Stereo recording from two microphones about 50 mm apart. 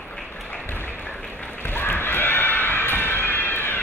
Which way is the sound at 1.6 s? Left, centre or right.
Left.